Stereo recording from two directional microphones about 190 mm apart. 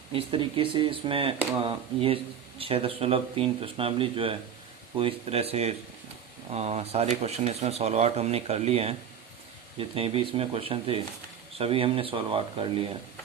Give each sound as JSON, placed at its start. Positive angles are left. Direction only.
{"t": 0.1, "sound": "speech", "side_deg": -30}